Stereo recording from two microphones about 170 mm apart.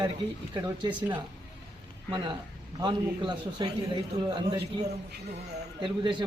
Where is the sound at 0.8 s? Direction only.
25° right (ahead or behind).